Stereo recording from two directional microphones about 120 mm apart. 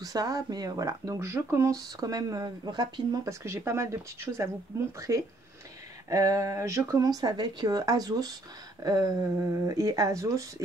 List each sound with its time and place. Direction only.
0.0 s speech: 30° right (ahead or behind)
3.4 s speech: 25° right (ahead or behind)